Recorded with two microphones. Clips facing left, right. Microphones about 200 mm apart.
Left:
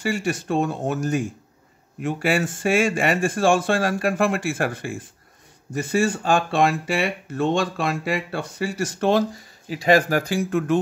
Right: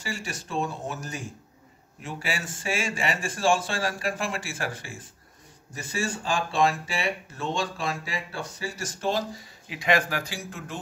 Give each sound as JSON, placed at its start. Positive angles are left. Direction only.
{"t": 0.0, "sound": "speech", "side_deg": 60}
{"t": 9.7, "sound": "speech", "side_deg": 35}